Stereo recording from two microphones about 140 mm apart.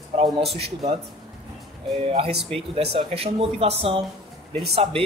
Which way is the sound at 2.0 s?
40° right (ahead or behind).